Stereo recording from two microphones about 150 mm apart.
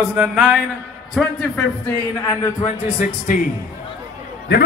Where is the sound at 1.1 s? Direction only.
10° left (ahead or behind).